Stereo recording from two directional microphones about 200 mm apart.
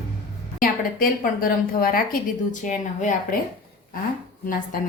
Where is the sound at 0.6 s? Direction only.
45° left (ahead or behind).